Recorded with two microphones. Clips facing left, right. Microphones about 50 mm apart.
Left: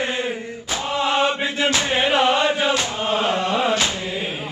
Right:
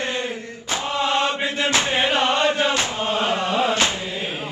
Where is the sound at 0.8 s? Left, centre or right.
Centre.